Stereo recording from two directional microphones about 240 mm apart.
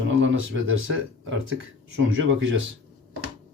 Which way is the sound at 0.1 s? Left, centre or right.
Right.